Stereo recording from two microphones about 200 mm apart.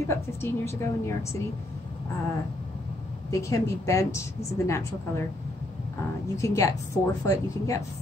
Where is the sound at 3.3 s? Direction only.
15° left (ahead or behind).